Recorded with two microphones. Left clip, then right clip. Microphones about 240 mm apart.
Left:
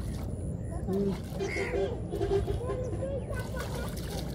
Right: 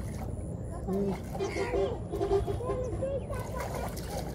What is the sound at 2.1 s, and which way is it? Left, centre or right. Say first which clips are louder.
Speech: right 1 dB; right.